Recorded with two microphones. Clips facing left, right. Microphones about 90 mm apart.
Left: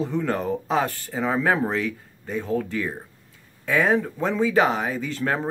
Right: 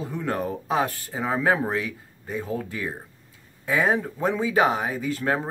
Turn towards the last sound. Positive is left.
turn(degrees=-10)  # may be behind; listen again after turning